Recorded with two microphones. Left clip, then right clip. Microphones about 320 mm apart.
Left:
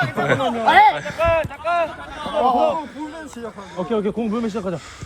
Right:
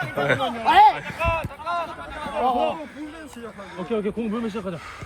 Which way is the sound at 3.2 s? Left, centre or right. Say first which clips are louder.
Left 5 dB; centre.